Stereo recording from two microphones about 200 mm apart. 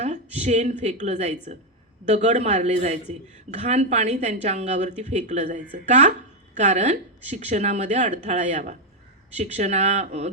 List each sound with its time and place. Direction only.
0.0 s a woman's voice: 35° right (ahead or behind)